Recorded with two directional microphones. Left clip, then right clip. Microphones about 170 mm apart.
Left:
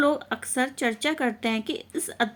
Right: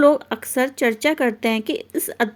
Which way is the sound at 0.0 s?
30° right (ahead or behind).